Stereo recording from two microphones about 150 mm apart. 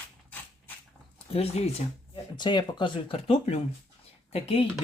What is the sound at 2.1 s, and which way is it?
Speech, 30° left (ahead or behind).